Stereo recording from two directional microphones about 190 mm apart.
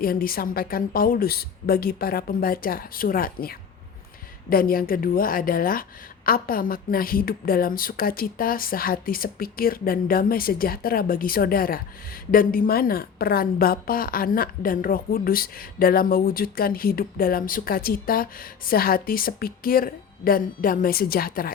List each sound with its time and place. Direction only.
0.0 s a woman's voice: 50° left (ahead or behind)